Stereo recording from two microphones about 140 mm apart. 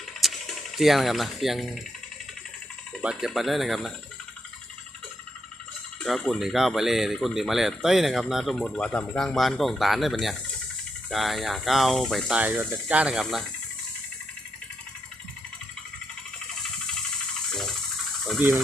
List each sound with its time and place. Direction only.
0.2 s speech: centre (ahead or behind)
3.0 s speech: 5° right (ahead or behind)
6.0 s speech: centre (ahead or behind)
12.4 s speech: 10° right (ahead or behind)
18.3 s speech: 15° right (ahead or behind)